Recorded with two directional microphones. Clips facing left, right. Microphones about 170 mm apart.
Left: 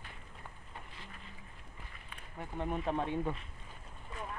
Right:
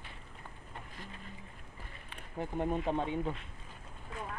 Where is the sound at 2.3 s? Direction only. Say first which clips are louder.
Right 4 dB; 25° right (ahead or behind).